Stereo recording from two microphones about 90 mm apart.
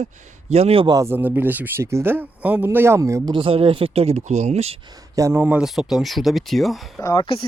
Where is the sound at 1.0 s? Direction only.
25° right (ahead or behind).